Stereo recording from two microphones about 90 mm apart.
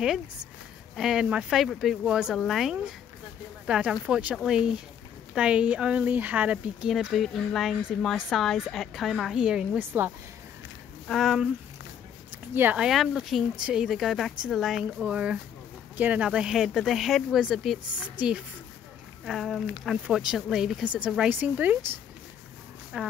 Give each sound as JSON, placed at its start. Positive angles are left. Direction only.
{"t": 0.9, "sound": "speech", "side_deg": -5}
{"t": 9.8, "sound": "a woman's voice", "side_deg": -20}
{"t": 11.1, "sound": "speech", "side_deg": 5}
{"t": 12.9, "sound": "speech", "side_deg": 0}
{"t": 15.0, "sound": "speech", "side_deg": -15}
{"t": 19.2, "sound": "speech", "side_deg": 0}
{"t": 22.9, "sound": "speech", "side_deg": -10}